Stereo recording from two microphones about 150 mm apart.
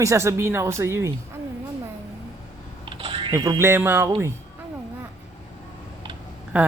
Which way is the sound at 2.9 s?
35° right (ahead or behind).